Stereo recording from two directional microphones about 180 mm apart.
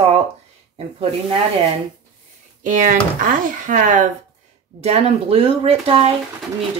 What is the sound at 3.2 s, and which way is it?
Speech, 45° right (ahead or behind).